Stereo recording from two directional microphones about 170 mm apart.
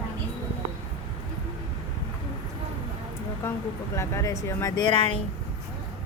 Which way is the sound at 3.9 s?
15° left (ahead or behind).